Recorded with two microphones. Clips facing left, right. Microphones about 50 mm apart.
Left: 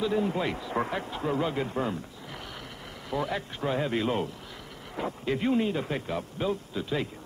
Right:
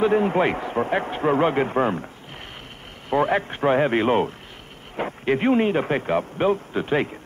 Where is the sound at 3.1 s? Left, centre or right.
Right.